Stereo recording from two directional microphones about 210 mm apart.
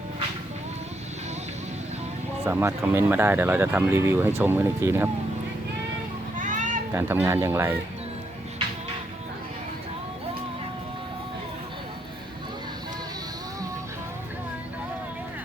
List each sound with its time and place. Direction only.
2.5 s speech: 10° right (ahead or behind)
6.3 s a sound: 35° right (ahead or behind)
6.9 s speech: 10° right (ahead or behind)